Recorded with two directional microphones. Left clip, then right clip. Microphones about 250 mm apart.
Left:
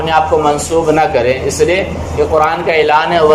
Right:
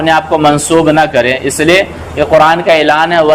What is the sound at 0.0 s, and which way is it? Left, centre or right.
Speech, right.